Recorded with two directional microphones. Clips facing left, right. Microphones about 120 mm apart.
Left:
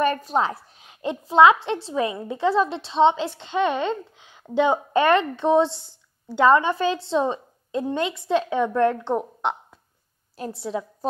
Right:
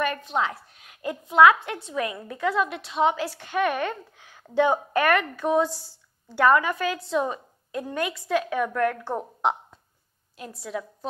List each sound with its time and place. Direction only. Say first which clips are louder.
0.0 s a woman's voice: left 4 dB; 35° left (ahead or behind); by 9.3 s 20° left (ahead or behind)
10.3 s a woman's voice: left 5 dB; 30° left (ahead or behind)